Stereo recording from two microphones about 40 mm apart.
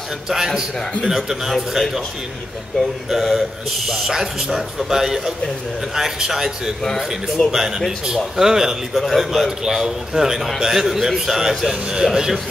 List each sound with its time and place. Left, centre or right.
1.0 s a man's voice: centre
1.8 s a man's voice: centre
3.1 s a man's voice: centre
9.0 s a man's voice: centre
9.6 s a man's voice: centre